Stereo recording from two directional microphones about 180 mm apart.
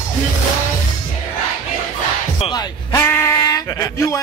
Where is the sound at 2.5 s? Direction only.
15° left (ahead or behind).